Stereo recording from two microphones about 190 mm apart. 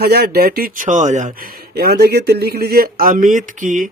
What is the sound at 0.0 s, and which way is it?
Speech, 55° right (ahead or behind).